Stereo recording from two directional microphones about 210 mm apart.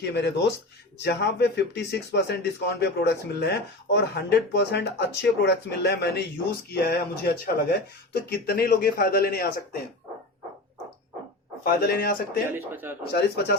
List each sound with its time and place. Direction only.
0.0 s speech: 55° left (ahead or behind)
11.6 s speech: 45° left (ahead or behind)
12.5 s speech: 10° right (ahead or behind)
13.1 s speech: 50° left (ahead or behind)